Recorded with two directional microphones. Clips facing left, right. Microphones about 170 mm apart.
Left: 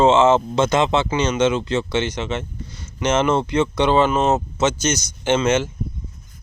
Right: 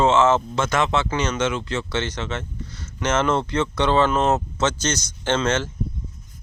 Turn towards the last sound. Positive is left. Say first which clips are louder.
# left 4 dB
turn(degrees=10)  # may be behind; listen again after turning